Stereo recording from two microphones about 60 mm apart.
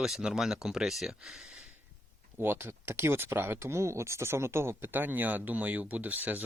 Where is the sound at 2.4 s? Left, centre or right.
Right.